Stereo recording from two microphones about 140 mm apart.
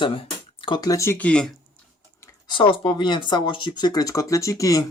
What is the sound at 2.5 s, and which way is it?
Speech, 40° left (ahead or behind).